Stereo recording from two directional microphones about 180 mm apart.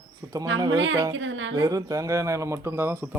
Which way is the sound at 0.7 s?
90° right.